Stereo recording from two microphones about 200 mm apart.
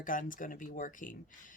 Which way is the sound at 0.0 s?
40° left (ahead or behind).